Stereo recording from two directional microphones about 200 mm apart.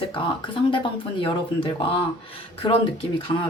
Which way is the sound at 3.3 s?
15° left (ahead or behind).